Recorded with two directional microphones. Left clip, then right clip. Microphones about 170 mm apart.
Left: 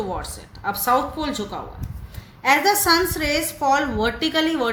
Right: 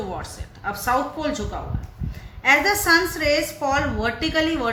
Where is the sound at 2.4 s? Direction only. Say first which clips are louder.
Even; 25° left (ahead or behind).